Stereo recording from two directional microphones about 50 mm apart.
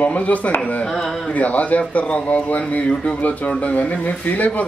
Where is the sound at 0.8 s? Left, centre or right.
Centre.